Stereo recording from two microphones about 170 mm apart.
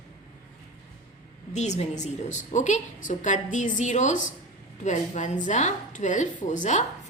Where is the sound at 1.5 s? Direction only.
40° left (ahead or behind).